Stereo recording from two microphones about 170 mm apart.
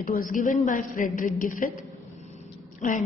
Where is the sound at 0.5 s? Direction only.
50° left (ahead or behind).